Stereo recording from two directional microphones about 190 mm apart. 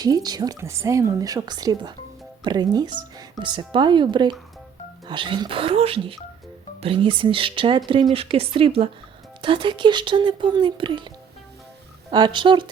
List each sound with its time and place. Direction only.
0.0 s a woman's voice: 20° right (ahead or behind)
12.1 s a woman's voice: 25° right (ahead or behind)